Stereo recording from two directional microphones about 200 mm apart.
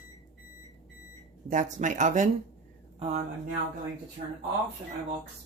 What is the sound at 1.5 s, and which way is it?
Speech, 40° right (ahead or behind).